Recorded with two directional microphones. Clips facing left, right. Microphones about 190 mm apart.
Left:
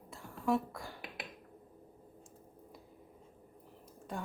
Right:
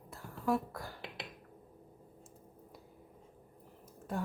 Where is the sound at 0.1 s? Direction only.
Centre (ahead or behind).